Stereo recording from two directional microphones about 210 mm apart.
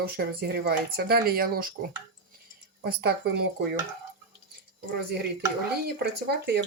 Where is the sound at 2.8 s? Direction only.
50° right (ahead or behind).